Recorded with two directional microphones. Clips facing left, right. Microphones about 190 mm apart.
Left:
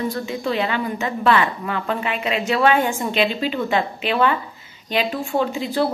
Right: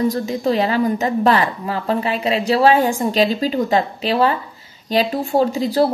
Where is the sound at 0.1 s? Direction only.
40° right (ahead or behind).